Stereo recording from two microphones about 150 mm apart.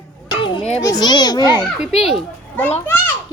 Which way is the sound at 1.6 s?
5° right (ahead or behind).